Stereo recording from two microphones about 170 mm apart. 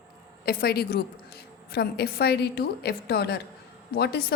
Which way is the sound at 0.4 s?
65° left (ahead or behind).